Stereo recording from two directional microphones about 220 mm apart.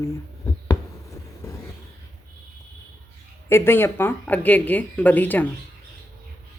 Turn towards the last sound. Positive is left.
turn(degrees=10)  # may be behind; listen again after turning